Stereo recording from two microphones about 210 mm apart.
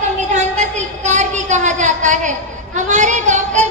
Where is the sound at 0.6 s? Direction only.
35° right (ahead or behind).